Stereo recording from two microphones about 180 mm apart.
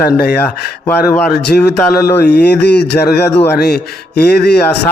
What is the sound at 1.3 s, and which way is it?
Speech, 65° left (ahead or behind).